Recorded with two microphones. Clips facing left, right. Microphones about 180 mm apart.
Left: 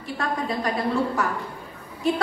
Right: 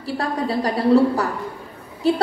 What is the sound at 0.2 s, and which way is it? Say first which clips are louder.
A woman's voice: right 3 dB; 35° right (ahead or behind).